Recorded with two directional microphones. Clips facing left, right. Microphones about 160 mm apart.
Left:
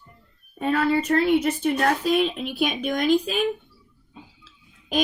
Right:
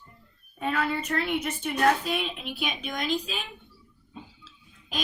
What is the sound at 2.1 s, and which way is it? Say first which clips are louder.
Speech: left 9 dB; 50° left (ahead or behind).